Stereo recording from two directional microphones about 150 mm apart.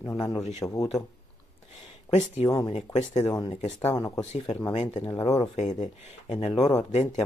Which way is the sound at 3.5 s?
50° left (ahead or behind).